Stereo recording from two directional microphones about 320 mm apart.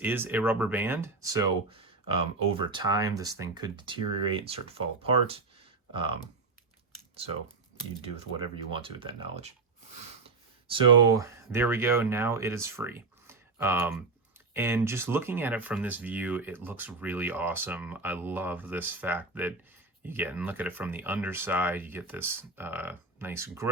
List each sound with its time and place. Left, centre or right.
0.0 s speech: centre
8.1 s speech: centre
10.7 s speech: centre